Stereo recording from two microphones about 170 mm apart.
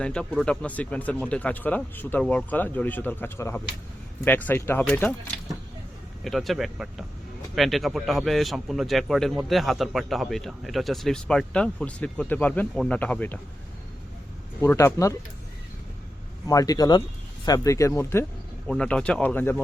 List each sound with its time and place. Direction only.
0.0 s speech: 5° left (ahead or behind)
6.2 s a man's voice: centre (ahead or behind)
14.6 s speech: 15° left (ahead or behind)
16.5 s speech: 20° left (ahead or behind)